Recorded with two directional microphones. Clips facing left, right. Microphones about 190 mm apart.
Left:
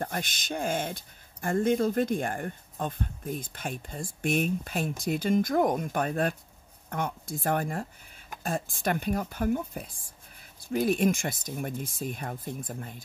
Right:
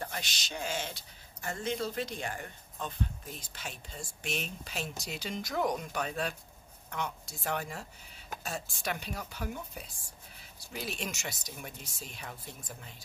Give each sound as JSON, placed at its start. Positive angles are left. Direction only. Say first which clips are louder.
{"t": 0.0, "sound": "speech", "louder": "left 7 dB", "side_deg": 50}